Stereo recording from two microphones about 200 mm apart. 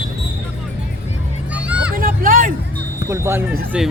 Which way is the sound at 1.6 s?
5° right (ahead or behind).